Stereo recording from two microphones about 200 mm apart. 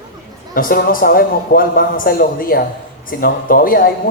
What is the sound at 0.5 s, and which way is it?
A man's voice, 45° left (ahead or behind).